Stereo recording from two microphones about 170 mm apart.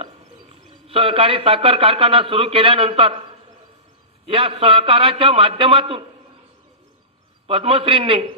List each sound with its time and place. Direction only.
0.0 s a man's voice: 35° right (ahead or behind)
4.3 s a man's voice: 30° right (ahead or behind)
7.4 s a man's voice: 35° right (ahead or behind)